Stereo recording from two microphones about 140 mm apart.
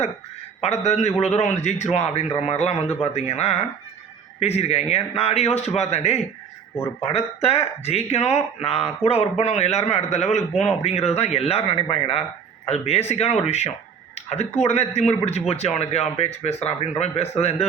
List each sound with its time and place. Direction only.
0.6 s a man's voice: 50° left (ahead or behind)